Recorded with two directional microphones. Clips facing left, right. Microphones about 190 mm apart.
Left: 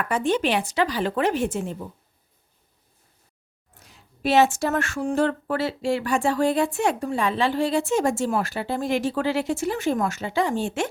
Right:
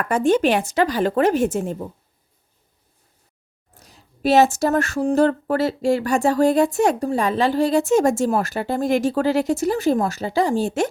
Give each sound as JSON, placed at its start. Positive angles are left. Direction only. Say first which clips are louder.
{"t": 0.0, "sound": "speech", "louder": "right 5 dB", "side_deg": -45}
{"t": 3.8, "sound": "speech", "louder": "right 6 dB", "side_deg": -40}